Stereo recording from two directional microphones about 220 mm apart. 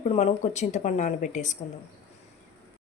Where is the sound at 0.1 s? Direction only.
30° left (ahead or behind).